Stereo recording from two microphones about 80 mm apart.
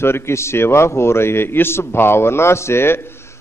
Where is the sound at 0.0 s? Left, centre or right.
Left.